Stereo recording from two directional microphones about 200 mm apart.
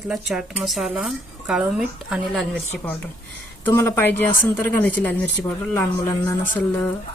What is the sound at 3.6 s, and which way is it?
A woman's voice, 10° left (ahead or behind).